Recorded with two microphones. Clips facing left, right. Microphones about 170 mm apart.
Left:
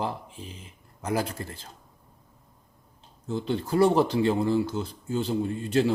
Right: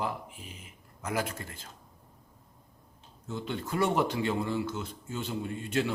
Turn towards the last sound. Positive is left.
turn(degrees=35)  # may be behind; listen again after turning